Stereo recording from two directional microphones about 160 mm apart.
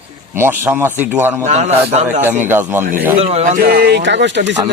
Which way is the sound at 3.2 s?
40° right (ahead or behind).